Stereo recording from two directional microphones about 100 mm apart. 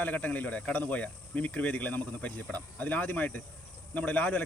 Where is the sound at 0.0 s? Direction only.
15° left (ahead or behind).